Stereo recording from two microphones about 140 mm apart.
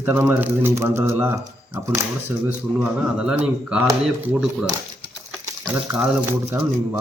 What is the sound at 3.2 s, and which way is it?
Speech, 5° right (ahead or behind).